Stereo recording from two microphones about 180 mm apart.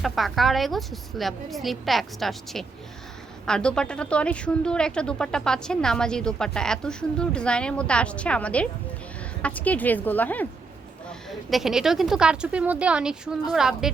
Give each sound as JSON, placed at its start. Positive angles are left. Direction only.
{"t": 0.0, "sound": "a woman's voice", "side_deg": 0}
{"t": 11.3, "sound": "a woman's voice", "side_deg": 0}